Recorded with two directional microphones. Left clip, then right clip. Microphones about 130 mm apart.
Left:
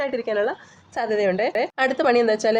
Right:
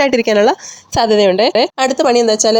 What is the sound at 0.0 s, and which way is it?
A woman's voice, 55° right (ahead or behind).